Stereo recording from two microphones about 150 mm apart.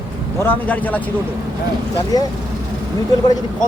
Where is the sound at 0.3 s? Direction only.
10° left (ahead or behind).